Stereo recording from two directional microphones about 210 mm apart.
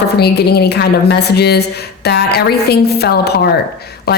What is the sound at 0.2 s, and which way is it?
Speech, 50° left (ahead or behind).